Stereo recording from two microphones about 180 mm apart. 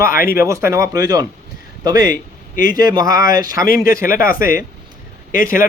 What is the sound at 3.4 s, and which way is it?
Speech, 20° right (ahead or behind).